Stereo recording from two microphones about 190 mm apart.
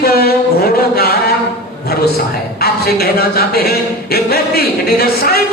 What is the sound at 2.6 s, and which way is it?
A man's voice, 55° left (ahead or behind).